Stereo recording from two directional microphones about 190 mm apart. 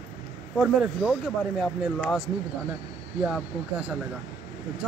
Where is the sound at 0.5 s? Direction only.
5° right (ahead or behind).